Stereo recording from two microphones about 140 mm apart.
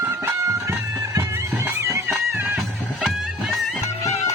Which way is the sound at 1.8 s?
20° right (ahead or behind).